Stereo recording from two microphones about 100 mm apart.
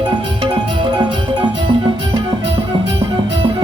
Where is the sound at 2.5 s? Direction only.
75° right (ahead or behind).